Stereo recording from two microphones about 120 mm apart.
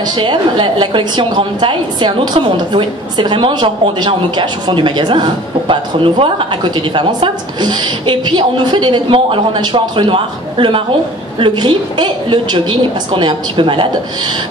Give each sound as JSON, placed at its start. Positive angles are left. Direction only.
{"t": 0.1, "sound": "a woman's voice", "side_deg": -40}